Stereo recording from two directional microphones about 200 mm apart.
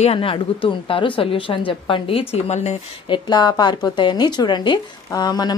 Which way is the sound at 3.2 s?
20° left (ahead or behind).